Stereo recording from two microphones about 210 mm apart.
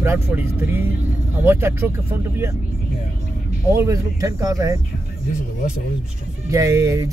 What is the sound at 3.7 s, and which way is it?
Speech, 15° right (ahead or behind).